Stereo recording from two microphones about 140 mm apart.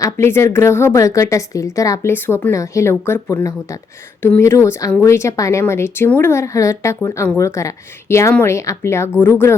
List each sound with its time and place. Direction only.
0.0 s a woman's voice: 20° left (ahead or behind)